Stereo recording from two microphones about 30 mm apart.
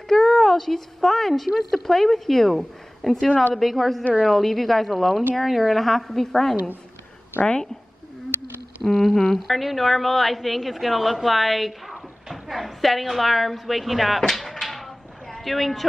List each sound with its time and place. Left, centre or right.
0.1 s a woman's voice: centre
8.8 s speech: centre
9.4 s a woman's voice: centre
12.3 s a sound: centre
13.1 s a woman's voice: centre
14.3 s a sound: centre
15.3 s speech: centre